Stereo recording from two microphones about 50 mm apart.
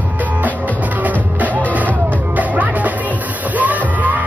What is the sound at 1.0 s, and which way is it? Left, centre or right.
Music, right.